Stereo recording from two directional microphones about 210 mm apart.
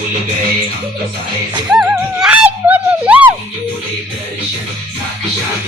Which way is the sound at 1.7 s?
Centre (ahead or behind).